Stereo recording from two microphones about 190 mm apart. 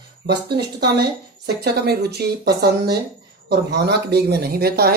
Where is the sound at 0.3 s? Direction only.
60° right (ahead or behind).